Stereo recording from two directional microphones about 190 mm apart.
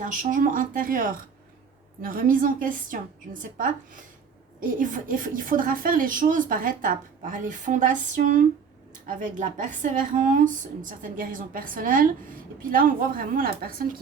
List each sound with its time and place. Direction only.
0.0 s a woman's voice: 45° right (ahead or behind)
4.6 s a woman's voice: 45° right (ahead or behind)